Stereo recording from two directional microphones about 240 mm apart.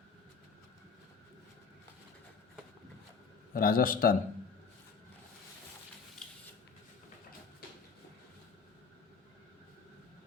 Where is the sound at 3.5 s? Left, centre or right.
Left.